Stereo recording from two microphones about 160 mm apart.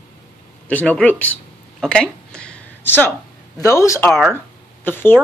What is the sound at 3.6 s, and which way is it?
A man's voice, 20° left (ahead or behind).